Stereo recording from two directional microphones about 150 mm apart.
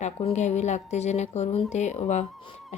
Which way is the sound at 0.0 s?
45° left (ahead or behind).